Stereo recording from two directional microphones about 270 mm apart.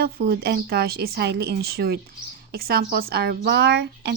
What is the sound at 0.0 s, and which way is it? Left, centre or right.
Speech, right.